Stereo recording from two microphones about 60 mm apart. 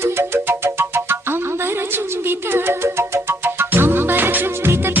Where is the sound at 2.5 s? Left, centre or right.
Right.